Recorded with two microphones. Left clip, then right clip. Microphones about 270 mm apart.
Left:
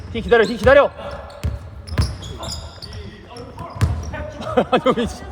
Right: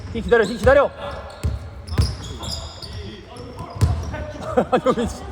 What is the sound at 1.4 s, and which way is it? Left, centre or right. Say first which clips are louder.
Basketball bounce: even; centre.